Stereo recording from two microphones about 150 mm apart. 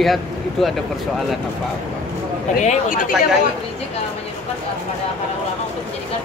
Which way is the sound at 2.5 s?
60° left (ahead or behind).